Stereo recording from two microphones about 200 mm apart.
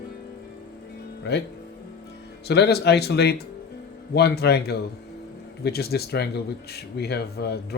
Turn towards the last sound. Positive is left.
turn(degrees=55)  # may be behind; listen again after turning